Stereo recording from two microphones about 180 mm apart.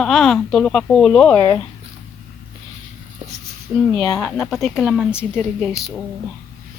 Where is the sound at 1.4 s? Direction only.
20° left (ahead or behind).